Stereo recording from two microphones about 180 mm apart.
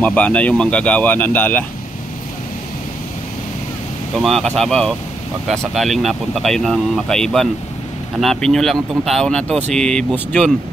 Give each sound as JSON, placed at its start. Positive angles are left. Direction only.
{"t": 0.0, "sound": "speech", "side_deg": 10}
{"t": 4.1, "sound": "speech", "side_deg": 0}